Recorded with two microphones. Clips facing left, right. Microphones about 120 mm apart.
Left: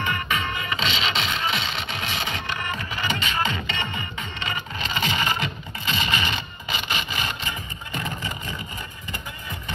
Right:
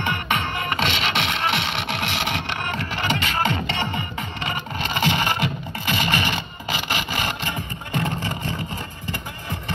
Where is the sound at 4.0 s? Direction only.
60° right (ahead or behind).